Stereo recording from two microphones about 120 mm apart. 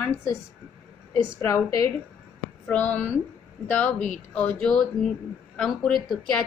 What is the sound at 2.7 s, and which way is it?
A woman's voice, 10° left (ahead or behind).